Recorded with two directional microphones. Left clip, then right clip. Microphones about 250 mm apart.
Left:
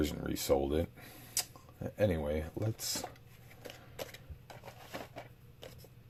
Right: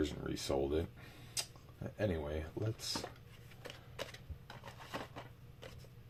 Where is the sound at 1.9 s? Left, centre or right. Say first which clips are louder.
Left 6 dB; left.